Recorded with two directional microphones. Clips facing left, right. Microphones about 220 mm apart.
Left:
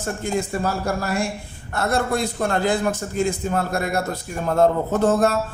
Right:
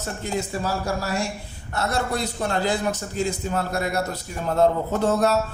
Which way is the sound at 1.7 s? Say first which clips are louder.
Left 3 dB; 50° left (ahead or behind).